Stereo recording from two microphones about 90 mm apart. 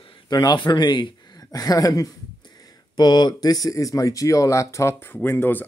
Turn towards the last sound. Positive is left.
turn(degrees=25)  # may be behind; listen again after turning